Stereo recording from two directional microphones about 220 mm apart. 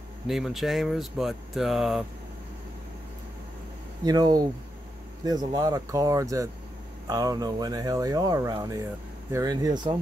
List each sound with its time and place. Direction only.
0.3 s speech: centre (ahead or behind)
4.0 s speech: 15° right (ahead or behind)